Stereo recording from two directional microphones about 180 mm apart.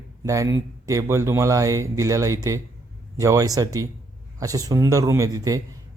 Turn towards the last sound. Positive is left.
turn(degrees=-20)  # may be behind; listen again after turning